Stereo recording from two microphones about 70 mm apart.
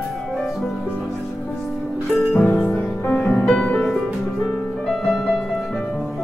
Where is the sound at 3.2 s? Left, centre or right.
Centre.